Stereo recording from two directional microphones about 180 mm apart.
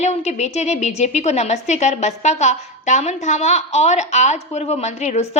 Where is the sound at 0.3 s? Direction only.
40° left (ahead or behind).